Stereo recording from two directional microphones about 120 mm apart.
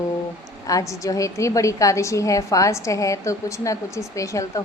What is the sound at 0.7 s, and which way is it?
Speech, 25° left (ahead or behind).